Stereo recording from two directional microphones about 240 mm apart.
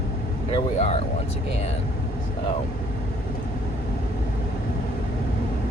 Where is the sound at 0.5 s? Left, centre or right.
Left.